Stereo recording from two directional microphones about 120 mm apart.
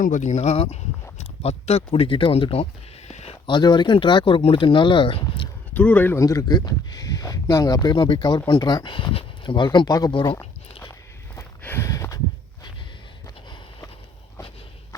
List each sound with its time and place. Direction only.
0.1 s speech: 90° left; by 2.6 s 55° left (ahead or behind)
3.1 s a sound: 65° left (ahead or behind)
3.4 s speech: 40° left (ahead or behind)
5.7 s speech: 10° left (ahead or behind)
6.1 s speech: 30° left (ahead or behind)
11.3 s a sound: 20° left (ahead or behind)
13.2 s sniff: 30° left (ahead or behind)